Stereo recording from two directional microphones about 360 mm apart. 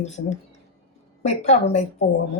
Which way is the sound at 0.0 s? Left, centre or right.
Centre.